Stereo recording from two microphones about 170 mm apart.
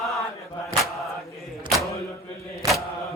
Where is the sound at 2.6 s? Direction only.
20° right (ahead or behind).